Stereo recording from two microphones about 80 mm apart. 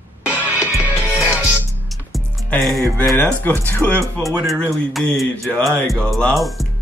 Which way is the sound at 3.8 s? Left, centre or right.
Centre.